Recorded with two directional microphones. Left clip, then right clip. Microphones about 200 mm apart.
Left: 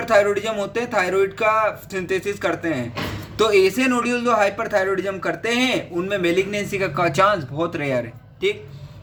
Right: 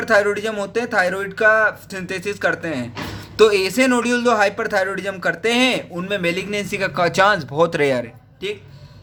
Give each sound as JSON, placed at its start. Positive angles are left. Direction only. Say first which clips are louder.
{"t": 0.1, "sound": "a man's voice", "louder": "even", "side_deg": -25}
{"t": 7.5, "sound": "speech", "louder": "right 6 dB", "side_deg": -35}